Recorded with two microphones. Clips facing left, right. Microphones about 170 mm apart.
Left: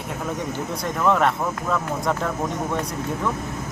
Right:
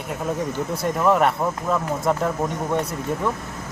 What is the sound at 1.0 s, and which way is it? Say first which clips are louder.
Speech: right 1 dB; 10° right (ahead or behind).